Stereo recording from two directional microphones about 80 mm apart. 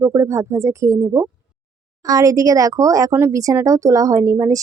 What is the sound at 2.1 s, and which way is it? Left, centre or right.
A woman's voice, right.